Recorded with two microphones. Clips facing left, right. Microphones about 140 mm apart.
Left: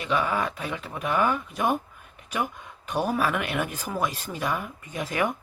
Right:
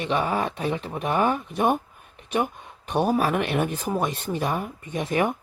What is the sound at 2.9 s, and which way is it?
Speech, 30° right (ahead or behind).